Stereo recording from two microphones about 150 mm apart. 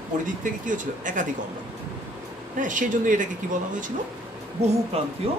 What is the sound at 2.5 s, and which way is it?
Speech, 60° right (ahead or behind).